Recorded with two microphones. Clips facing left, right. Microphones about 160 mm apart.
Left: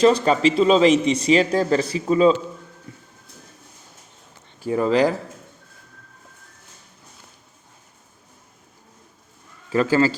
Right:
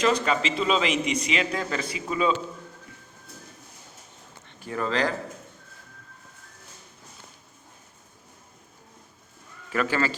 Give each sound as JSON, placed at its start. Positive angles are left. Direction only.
{"t": 0.0, "sound": "a man's voice", "side_deg": 35}
{"t": 4.7, "sound": "speech", "side_deg": 15}
{"t": 9.7, "sound": "a man's voice", "side_deg": 30}